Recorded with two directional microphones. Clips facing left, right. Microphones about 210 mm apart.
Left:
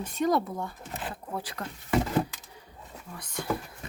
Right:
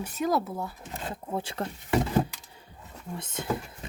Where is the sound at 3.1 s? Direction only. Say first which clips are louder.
Right 1 dB; 25° right (ahead or behind).